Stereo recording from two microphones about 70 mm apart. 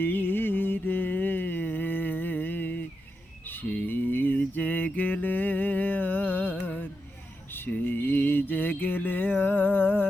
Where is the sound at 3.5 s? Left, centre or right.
Left.